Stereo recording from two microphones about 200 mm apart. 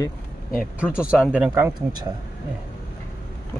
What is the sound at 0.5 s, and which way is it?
Speech, 5° right (ahead or behind).